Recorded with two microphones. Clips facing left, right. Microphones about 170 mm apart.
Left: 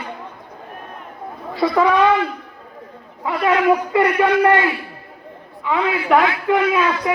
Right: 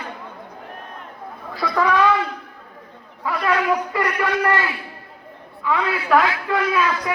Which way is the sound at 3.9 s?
25° left (ahead or behind).